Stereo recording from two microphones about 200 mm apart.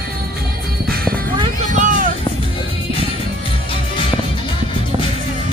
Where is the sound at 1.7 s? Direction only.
40° right (ahead or behind).